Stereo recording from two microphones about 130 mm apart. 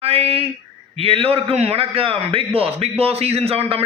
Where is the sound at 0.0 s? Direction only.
50° right (ahead or behind).